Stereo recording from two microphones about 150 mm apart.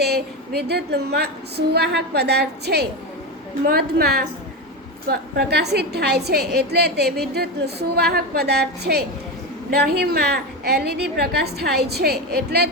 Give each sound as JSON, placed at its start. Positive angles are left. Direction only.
{"t": 0.0, "sound": "a woman's voice", "side_deg": -90}